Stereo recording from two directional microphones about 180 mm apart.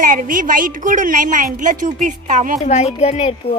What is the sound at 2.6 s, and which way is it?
Speech, 40° left (ahead or behind).